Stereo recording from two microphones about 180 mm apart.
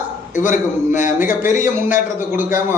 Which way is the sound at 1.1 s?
10° right (ahead or behind).